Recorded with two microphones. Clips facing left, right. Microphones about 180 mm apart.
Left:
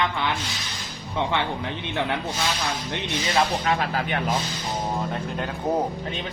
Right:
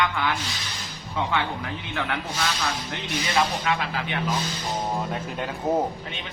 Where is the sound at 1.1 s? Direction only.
25° left (ahead or behind).